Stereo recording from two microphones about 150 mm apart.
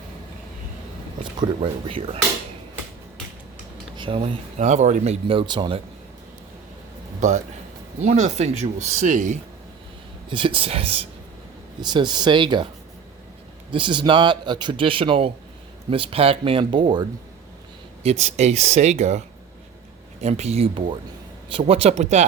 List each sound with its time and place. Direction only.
1.4 s speech: 35° right (ahead or behind)
3.9 s speech: 35° right (ahead or behind)
7.2 s a man's voice: 50° right (ahead or behind)
10.2 s speech: 35° right (ahead or behind)
13.7 s speech: 35° right (ahead or behind)
18.0 s speech: 45° right (ahead or behind)
20.2 s speech: 45° right (ahead or behind)